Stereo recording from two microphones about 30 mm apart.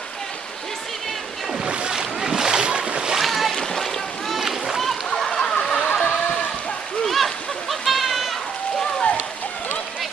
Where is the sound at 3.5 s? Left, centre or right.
Centre.